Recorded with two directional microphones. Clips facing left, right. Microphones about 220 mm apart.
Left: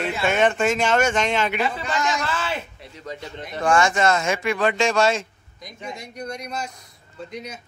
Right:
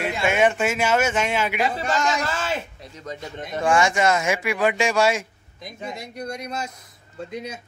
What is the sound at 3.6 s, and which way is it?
Speech, 15° right (ahead or behind).